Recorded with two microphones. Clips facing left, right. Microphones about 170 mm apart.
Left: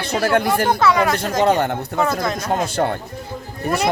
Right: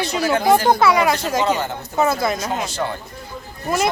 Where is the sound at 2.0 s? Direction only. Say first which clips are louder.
Right 2 dB; 5° right (ahead or behind).